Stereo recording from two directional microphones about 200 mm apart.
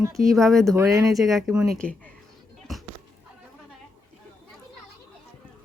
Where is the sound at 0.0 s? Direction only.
15° right (ahead or behind).